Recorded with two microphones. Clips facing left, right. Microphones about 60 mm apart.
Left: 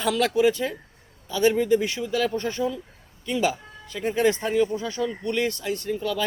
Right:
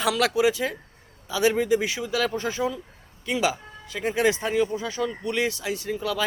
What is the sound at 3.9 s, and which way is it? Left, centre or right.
Speech, centre.